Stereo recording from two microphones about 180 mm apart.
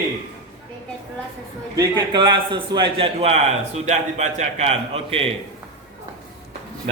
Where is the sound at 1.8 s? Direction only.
25° right (ahead or behind).